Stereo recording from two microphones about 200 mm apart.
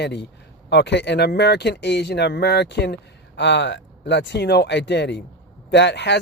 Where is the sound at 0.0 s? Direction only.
55° left (ahead or behind).